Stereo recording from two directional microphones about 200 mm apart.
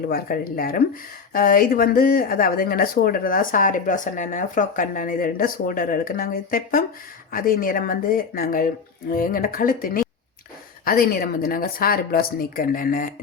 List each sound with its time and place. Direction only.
0.1 s speech: 45° left (ahead or behind)